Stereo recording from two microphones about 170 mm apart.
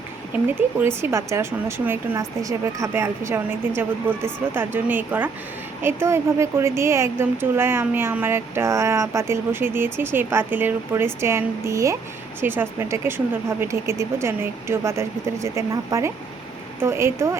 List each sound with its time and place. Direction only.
0.4 s speech: 10° right (ahead or behind)